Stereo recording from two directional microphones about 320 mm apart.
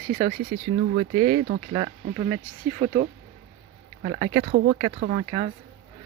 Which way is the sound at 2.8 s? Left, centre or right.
Right.